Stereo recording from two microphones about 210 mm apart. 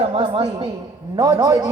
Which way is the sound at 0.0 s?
25° right (ahead or behind).